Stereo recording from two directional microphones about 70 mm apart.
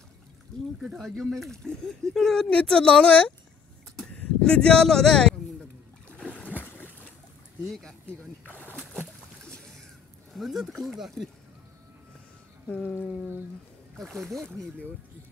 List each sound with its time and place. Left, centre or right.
0.9 s a woman's voice: centre
4.0 s a sound: centre
6.3 s boat: left
7.6 s speech: centre
8.5 s a sound: left
10.3 s speech: centre
14.1 s speech: centre